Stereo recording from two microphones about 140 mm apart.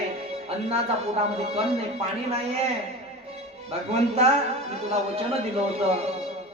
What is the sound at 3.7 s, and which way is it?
Mantra, 50° right (ahead or behind).